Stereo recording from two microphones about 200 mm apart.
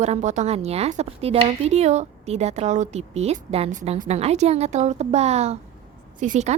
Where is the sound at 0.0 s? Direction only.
35° right (ahead or behind).